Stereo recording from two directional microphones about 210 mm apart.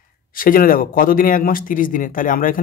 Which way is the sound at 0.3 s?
40° left (ahead or behind).